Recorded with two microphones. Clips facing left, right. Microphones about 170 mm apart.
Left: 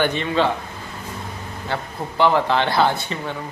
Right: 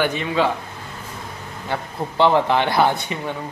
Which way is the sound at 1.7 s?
20° right (ahead or behind).